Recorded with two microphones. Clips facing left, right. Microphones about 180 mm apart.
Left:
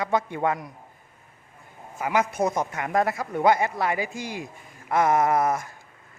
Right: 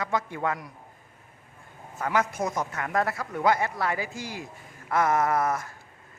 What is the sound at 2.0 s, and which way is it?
A man's voice, 15° left (ahead or behind).